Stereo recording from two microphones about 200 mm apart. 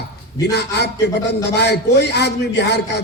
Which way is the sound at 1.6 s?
55° left (ahead or behind).